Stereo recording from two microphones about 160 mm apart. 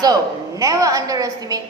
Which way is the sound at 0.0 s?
25° right (ahead or behind).